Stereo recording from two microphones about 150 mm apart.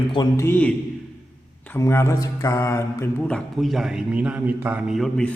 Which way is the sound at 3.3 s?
Centre (ahead or behind).